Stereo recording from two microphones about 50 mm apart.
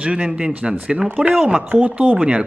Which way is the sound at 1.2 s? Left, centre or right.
Right.